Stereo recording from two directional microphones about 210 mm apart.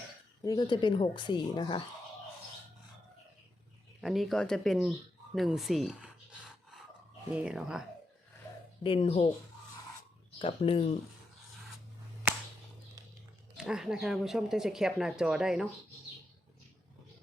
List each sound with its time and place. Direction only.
0.4 s speech: 20° left (ahead or behind)
4.0 s speech: centre (ahead or behind)
8.8 s speech: 25° left (ahead or behind)
10.3 s speech: 25° left (ahead or behind)
13.6 s speech: 5° right (ahead or behind)